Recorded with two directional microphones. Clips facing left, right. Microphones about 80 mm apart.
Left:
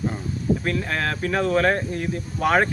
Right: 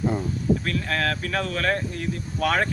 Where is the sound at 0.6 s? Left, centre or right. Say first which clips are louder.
Left 1 dB; centre.